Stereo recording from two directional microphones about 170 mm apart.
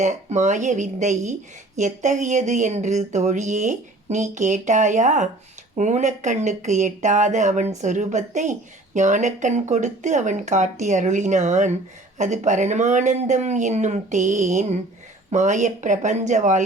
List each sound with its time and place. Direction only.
0.0 s speech: 45° right (ahead or behind)